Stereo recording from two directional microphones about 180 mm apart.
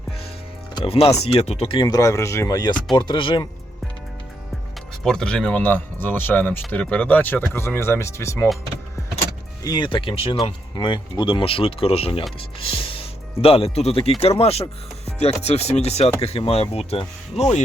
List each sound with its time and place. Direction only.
0.7 s speech: 30° left (ahead or behind)
5.0 s speech: 5° left (ahead or behind)
9.6 s speech: 25° left (ahead or behind)